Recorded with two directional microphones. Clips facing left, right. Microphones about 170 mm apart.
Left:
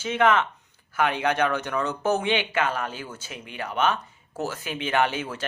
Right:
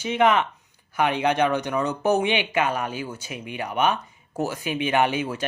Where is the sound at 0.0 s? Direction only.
15° right (ahead or behind).